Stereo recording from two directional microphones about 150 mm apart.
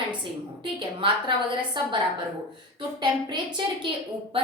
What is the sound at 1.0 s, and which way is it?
Speech, 35° right (ahead or behind).